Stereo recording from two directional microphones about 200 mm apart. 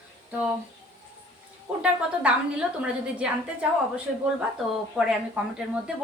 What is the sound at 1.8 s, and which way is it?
A woman's voice, 5° right (ahead or behind).